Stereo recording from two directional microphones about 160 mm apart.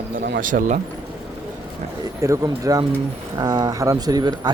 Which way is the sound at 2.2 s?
20° right (ahead or behind).